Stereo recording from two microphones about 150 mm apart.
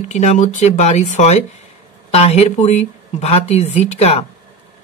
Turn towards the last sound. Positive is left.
turn(degrees=40)  # may be behind; listen again after turning